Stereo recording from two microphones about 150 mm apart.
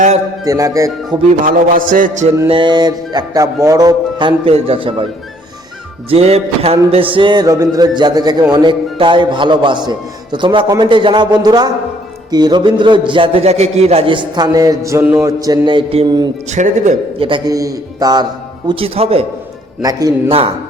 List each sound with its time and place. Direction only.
0.4 s a man's voice: 20° right (ahead or behind)
1.5 s a man's voice: 65° right (ahead or behind)
2.5 s a man's voice: 30° right (ahead or behind)
6.1 s a man's voice: 45° right (ahead or behind)
16.5 s speech: 55° right (ahead or behind)
17.2 s a man's voice: 35° right (ahead or behind)
18.7 s a man's voice: 40° right (ahead or behind)
19.8 s a man's voice: 25° right (ahead or behind)